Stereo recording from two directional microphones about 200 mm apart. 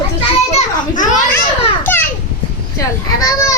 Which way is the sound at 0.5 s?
40° left (ahead or behind).